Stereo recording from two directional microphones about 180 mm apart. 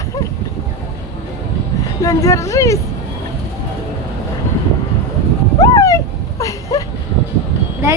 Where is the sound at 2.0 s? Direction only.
15° left (ahead or behind).